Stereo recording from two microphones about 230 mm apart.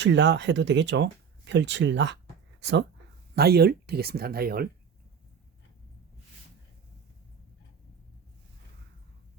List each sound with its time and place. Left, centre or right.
0.0 s speech: right